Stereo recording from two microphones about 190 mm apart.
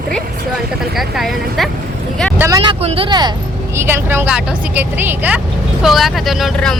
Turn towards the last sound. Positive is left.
turn(degrees=0)  # may be behind; listen again after turning